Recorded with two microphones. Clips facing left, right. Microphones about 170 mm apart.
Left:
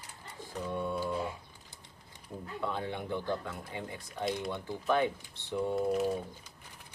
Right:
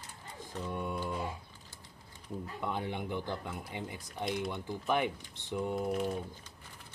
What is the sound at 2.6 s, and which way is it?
Speech, 15° right (ahead or behind).